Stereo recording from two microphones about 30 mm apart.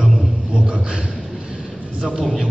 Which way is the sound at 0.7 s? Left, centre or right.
Right.